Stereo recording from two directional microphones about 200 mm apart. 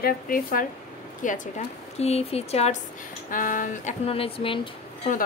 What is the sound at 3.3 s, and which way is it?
A woman's voice, 40° left (ahead or behind).